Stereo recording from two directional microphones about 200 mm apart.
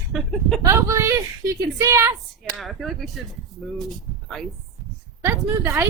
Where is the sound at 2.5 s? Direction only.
Centre (ahead or behind).